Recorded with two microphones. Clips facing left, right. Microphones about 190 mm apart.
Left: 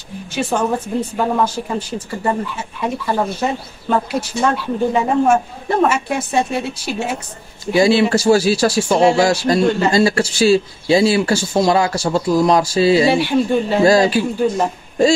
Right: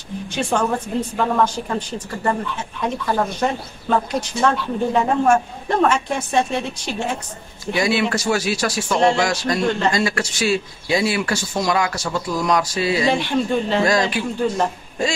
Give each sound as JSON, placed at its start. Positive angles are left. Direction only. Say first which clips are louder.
{"t": 0.3, "sound": "a woman's voice", "louder": "left 2 dB", "side_deg": 5}
{"t": 7.7, "sound": "speech", "louder": "left 7 dB", "side_deg": 30}
{"t": 13.1, "sound": "a woman's voice", "louder": "left 4 dB", "side_deg": 5}
{"t": 13.8, "sound": "speech", "louder": "left 7 dB", "side_deg": 30}